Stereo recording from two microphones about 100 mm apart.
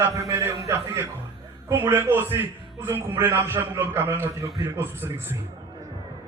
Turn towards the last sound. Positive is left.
turn(degrees=-25)  # may be behind; listen again after turning